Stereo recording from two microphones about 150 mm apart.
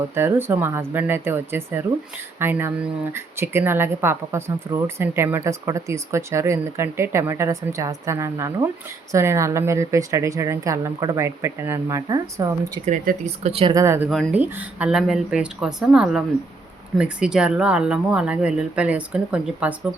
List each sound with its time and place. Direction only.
0.1 s speech: 15° right (ahead or behind)
13.2 s speech: 45° right (ahead or behind)
13.7 s speech: 20° right (ahead or behind)